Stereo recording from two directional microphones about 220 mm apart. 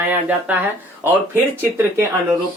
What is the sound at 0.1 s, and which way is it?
Speech, 5° right (ahead or behind).